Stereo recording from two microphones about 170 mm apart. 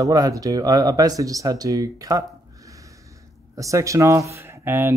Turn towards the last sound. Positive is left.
turn(degrees=-15)  # may be behind; listen again after turning